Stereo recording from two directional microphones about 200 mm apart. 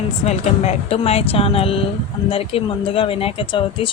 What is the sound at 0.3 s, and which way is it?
A woman's voice, 35° left (ahead or behind).